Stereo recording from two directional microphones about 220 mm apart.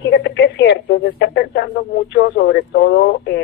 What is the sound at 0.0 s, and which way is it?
Radio, 55° left (ahead or behind).